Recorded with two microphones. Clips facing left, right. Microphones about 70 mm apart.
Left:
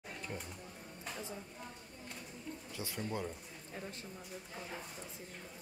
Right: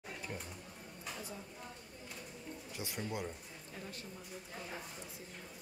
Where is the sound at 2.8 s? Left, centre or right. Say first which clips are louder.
Left 1 dB; centre.